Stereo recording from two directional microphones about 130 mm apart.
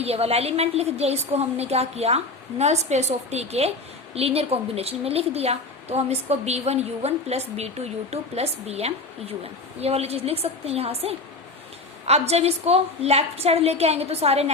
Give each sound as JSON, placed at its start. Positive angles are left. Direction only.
{"t": 0.0, "sound": "a woman's voice", "side_deg": -50}